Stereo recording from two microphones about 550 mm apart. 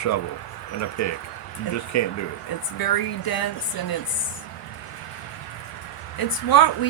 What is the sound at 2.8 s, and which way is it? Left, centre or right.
Speech, left.